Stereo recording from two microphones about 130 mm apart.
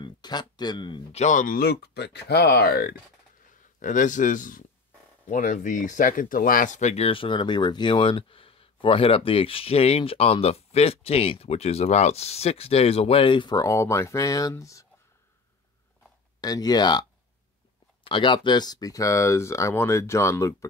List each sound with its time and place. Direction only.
0.0 s speech: 35° left (ahead or behind)
1.1 s speech: 70° left (ahead or behind)
3.8 s speech: 80° left; by 7.1 s 60° left (ahead or behind)
7.1 s speech: 40° left (ahead or behind); by 14.9 s 25° left (ahead or behind)
16.3 s speech: 30° left (ahead or behind)
18.0 s speech: 40° left (ahead or behind); by 20.5 s 25° left (ahead or behind)